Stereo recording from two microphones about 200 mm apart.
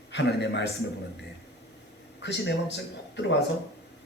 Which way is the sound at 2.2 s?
60° left (ahead or behind).